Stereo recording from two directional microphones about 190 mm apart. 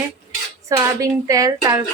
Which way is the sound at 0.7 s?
15° right (ahead or behind).